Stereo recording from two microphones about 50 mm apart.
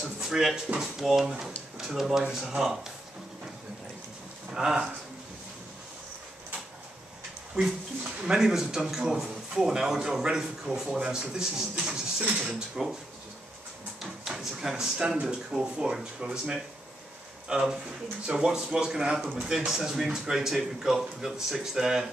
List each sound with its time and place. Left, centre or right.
0.2 s speech: centre
4.5 s speech: centre
8.2 s speech: centre
11.8 s a sound: centre
14.2 s speech: centre
17.5 s speech: centre